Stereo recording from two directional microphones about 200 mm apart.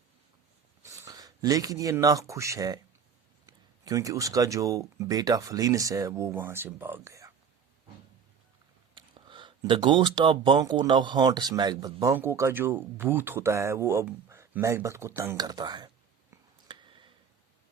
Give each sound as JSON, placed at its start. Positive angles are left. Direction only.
{"t": 0.8, "sound": "speech", "side_deg": -15}
{"t": 9.0, "sound": "speech", "side_deg": -25}
{"t": 16.3, "sound": "a sound", "side_deg": -25}